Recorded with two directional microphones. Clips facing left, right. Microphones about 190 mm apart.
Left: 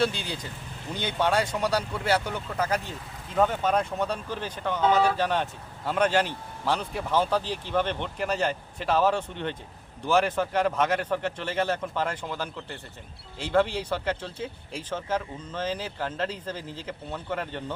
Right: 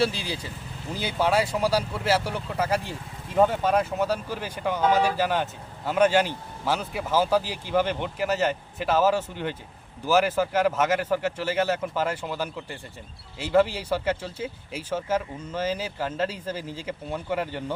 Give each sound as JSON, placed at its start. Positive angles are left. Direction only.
{"t": 0.0, "sound": "speech", "side_deg": -5}